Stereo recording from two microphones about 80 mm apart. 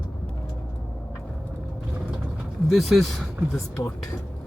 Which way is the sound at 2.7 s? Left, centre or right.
Centre.